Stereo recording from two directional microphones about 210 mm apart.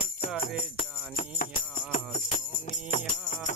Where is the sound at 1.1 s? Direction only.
40° left (ahead or behind).